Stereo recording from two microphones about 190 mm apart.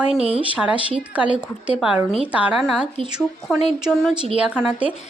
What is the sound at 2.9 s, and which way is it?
Speech, 25° right (ahead or behind).